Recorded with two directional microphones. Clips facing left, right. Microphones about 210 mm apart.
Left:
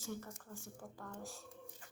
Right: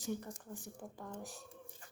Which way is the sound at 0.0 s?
20° right (ahead or behind).